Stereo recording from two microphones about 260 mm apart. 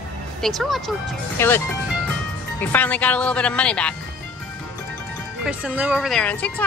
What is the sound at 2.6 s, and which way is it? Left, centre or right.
Speech, centre.